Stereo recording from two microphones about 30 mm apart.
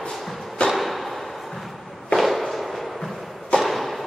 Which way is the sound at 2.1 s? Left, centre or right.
Centre.